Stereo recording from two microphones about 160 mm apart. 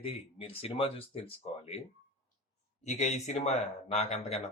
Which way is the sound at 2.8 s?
45° left (ahead or behind).